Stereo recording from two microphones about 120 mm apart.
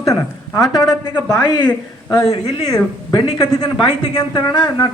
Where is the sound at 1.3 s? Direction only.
20° left (ahead or behind).